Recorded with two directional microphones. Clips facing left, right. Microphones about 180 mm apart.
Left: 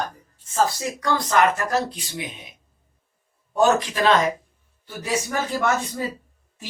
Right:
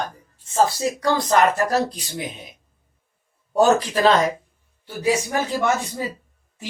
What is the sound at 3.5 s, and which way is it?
Speech, 35° right (ahead or behind).